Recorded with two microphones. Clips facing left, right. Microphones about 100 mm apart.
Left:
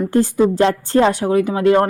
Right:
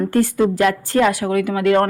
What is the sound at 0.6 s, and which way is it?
Speech, 30° left (ahead or behind).